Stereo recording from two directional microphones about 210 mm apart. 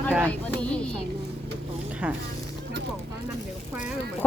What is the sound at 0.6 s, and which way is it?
Speech, 5° left (ahead or behind).